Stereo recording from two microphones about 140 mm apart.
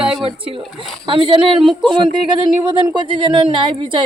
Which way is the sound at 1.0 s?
35° right (ahead or behind).